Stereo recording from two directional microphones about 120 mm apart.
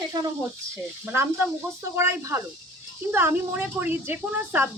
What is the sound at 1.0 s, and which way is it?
A woman's voice, 15° right (ahead or behind).